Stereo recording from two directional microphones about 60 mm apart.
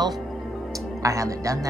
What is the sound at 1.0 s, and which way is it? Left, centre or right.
Speech, right.